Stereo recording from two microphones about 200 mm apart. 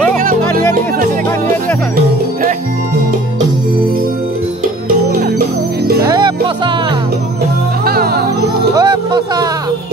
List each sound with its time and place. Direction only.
6.0 s music: 20° right (ahead or behind)
7.8 s music: 50° right (ahead or behind)
8.7 s music: 20° right (ahead or behind)